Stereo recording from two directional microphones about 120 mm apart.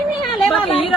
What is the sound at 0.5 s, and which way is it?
Speech, 45° left (ahead or behind).